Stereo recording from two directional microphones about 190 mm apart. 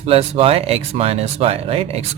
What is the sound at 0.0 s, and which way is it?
Speech, 30° right (ahead or behind).